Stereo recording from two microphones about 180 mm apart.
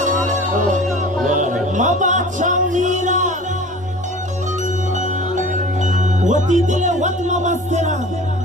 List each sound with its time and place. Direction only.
1.3 s music: 45° right (ahead or behind)
5.8 s music: 45° right (ahead or behind)